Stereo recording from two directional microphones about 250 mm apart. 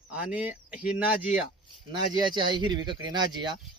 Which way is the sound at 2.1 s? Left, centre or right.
Centre.